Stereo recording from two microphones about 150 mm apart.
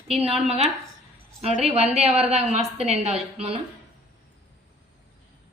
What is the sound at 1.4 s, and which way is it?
A woman's voice, 45° right (ahead or behind).